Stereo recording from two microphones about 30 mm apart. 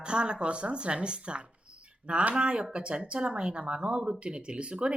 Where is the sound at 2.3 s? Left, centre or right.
Right.